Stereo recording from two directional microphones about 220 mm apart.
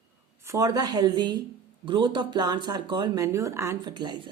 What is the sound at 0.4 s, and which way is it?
Speech, 15° right (ahead or behind).